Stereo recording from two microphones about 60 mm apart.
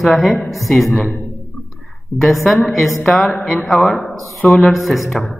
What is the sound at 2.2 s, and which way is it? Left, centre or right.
Mantra, centre.